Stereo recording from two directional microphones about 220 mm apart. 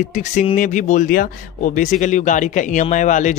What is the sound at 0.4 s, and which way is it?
Speech, 35° left (ahead or behind).